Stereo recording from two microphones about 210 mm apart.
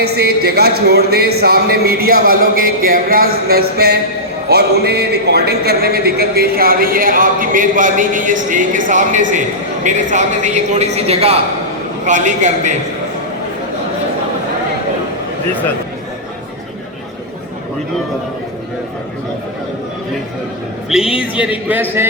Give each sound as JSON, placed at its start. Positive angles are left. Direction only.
{"t": 0.0, "sound": "a man's voice", "side_deg": -50}
{"t": 21.2, "sound": "speech", "side_deg": -5}